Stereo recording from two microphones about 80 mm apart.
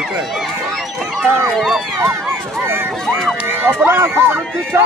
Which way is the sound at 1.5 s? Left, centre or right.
Centre.